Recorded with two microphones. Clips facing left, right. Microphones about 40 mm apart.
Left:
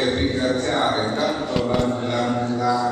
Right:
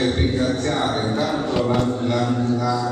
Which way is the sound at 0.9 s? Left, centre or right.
Left.